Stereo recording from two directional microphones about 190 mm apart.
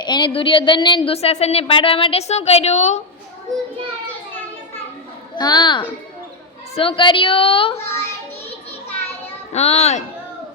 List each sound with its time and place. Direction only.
0.0 s a woman's voice: 25° left (ahead or behind)
5.4 s a woman's voice: 20° left (ahead or behind)
9.5 s a child's voice: 35° left (ahead or behind)